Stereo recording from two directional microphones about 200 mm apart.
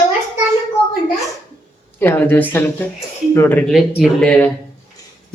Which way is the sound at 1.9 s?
10° left (ahead or behind).